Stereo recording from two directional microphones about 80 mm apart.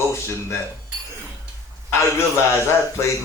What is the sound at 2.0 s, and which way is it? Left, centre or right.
Speech, left.